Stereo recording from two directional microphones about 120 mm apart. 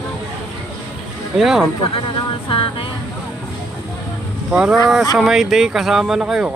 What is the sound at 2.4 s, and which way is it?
Speech, 45° left (ahead or behind).